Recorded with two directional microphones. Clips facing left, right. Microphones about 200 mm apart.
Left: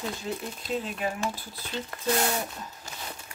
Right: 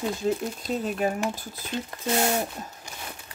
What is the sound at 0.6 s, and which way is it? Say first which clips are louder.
Speech: right 4 dB; 45° right (ahead or behind).